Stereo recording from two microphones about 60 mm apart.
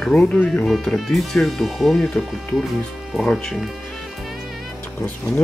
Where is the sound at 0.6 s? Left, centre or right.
Centre.